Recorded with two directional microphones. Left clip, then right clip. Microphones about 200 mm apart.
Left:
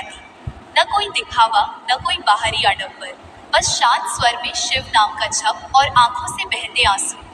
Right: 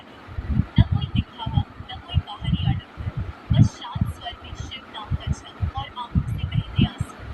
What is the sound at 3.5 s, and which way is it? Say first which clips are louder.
Speech: left 16 dB; 50° left (ahead or behind).